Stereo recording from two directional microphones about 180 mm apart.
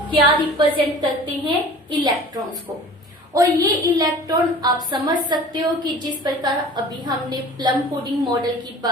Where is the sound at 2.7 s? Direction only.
15° right (ahead or behind).